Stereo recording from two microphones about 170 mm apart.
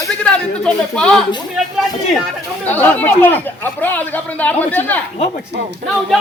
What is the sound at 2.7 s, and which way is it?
Chatter, 10° left (ahead or behind).